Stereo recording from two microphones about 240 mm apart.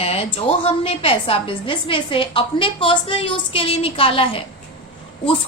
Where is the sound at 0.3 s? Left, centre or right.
Left.